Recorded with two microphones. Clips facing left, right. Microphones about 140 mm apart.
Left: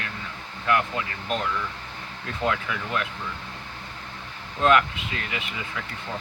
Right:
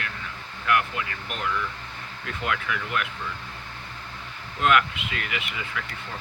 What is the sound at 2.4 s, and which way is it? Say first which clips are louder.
Speech: left 3 dB; 25° left (ahead or behind).